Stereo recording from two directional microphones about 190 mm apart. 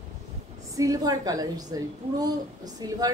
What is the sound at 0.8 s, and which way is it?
Speech, 20° right (ahead or behind).